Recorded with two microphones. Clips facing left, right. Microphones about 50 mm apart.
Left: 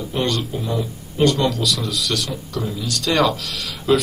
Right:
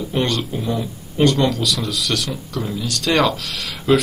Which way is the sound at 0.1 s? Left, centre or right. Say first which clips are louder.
Right 1 dB; right.